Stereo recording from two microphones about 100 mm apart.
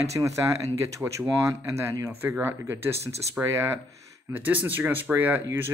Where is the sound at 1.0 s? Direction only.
15° right (ahead or behind).